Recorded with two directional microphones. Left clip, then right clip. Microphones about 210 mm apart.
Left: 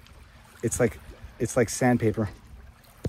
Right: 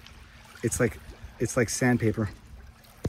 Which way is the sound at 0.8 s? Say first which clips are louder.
Left 4 dB; 45° left (ahead or behind).